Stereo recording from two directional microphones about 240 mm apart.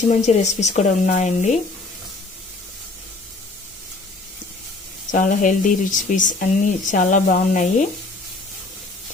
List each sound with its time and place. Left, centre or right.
0.1 s a woman's voice: left
5.1 s speech: left